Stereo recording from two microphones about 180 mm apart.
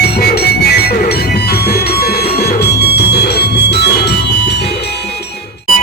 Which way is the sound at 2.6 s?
65° left (ahead or behind).